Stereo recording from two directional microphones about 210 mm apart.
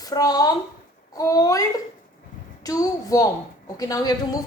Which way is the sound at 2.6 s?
15° left (ahead or behind).